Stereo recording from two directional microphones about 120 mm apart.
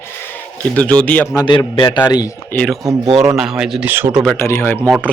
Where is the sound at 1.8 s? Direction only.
40° left (ahead or behind).